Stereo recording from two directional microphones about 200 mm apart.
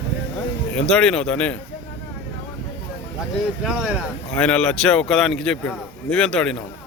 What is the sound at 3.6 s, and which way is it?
Speech, centre (ahead or behind).